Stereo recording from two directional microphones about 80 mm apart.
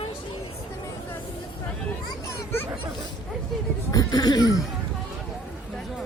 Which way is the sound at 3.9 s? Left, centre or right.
Left.